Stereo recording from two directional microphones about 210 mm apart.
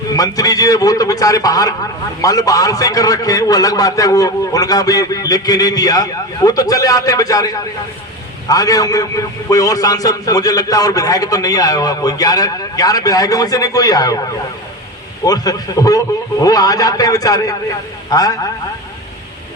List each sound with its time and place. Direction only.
0.2 s a man's voice: 15° left (ahead or behind)